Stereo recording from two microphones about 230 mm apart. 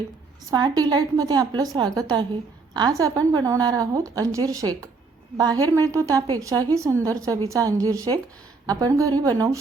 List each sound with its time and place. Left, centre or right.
0.8 s a woman's voice: centre